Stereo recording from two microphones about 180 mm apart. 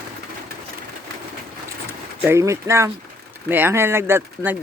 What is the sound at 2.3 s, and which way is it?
Speech, 15° right (ahead or behind).